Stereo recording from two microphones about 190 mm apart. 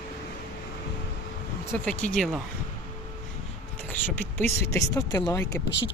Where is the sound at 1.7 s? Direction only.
5° left (ahead or behind).